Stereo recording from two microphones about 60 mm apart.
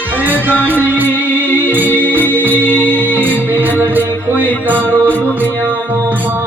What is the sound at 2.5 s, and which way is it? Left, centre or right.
Music, left.